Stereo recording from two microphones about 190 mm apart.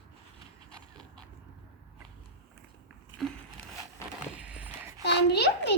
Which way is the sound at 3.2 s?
Centre (ahead or behind).